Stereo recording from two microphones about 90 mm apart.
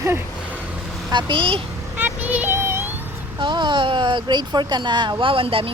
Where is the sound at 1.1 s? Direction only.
70° right (ahead or behind).